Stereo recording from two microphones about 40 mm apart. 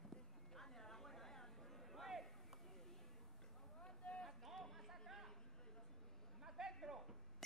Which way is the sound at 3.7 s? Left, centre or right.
Left.